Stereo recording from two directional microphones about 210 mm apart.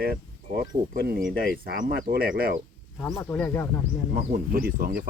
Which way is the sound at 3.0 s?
10° left (ahead or behind).